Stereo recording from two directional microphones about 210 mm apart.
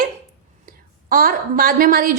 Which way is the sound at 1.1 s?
45° right (ahead or behind).